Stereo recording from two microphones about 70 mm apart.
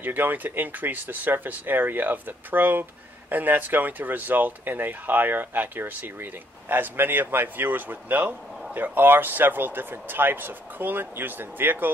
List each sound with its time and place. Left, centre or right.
0.0 s speech: right